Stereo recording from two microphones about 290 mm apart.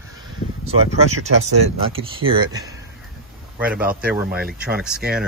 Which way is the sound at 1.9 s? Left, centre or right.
Centre.